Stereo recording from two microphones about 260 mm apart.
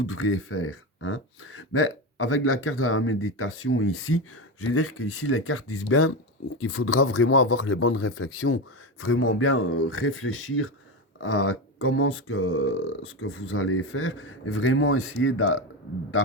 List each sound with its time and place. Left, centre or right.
0.0 s speech: left